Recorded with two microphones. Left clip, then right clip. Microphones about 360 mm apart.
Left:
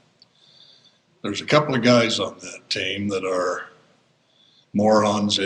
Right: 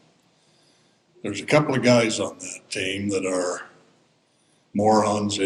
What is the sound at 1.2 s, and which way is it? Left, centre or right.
Speech, left.